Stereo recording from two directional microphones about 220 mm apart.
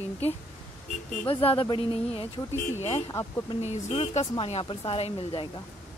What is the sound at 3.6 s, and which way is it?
Speech, 30° left (ahead or behind).